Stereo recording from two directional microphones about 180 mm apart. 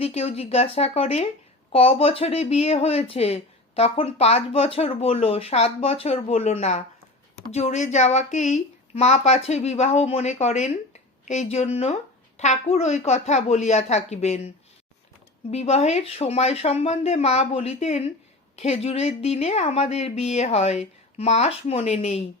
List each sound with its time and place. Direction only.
0.0 s speech: 35° left (ahead or behind)